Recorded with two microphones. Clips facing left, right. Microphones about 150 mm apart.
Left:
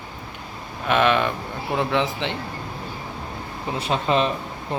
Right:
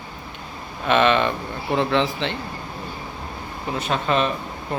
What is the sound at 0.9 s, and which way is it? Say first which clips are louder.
Speech: right 1 dB; 5° left (ahead or behind).